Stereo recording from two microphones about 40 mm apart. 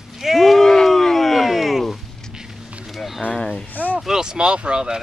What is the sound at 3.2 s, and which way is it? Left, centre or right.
Speech, left.